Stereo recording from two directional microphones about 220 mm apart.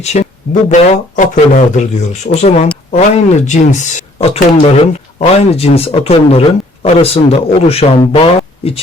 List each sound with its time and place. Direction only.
0.0 s speech: 30° left (ahead or behind)